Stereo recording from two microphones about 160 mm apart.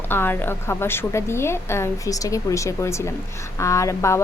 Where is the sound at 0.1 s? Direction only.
15° left (ahead or behind).